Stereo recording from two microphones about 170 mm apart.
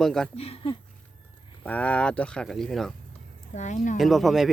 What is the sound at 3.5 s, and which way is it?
Speech, 45° left (ahead or behind).